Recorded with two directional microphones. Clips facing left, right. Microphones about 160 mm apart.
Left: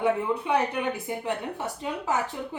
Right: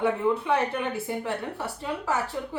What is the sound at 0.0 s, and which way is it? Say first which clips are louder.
A woman's voice: right 1 dB; 15° left (ahead or behind).